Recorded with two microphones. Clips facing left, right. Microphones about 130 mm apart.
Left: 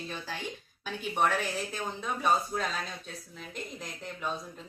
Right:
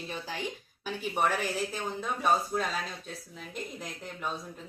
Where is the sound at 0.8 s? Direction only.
5° right (ahead or behind).